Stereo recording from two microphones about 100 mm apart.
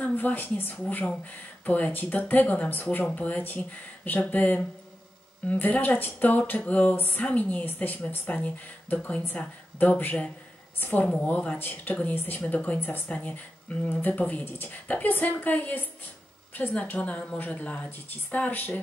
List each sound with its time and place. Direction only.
0.0 s speech: 20° left (ahead or behind)